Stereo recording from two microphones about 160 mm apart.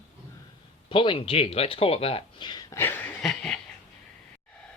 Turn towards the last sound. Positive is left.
turn(degrees=5)  # may be behind; listen again after turning